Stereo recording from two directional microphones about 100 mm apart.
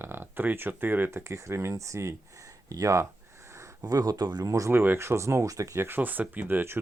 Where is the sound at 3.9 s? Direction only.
35° right (ahead or behind).